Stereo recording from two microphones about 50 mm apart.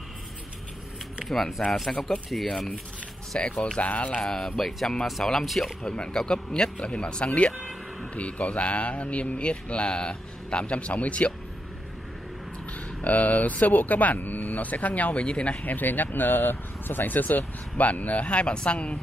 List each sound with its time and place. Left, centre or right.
1.2 s a sound: centre
1.6 s speech: centre
3.3 s speech: left
4.2 s speech: centre
5.8 s speech: centre
7.5 s music: centre
8.1 s speech: left
13.0 s speech: left
15.2 s speech: centre
15.6 s speech: left